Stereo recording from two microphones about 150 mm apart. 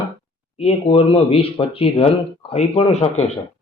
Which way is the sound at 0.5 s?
40° left (ahead or behind).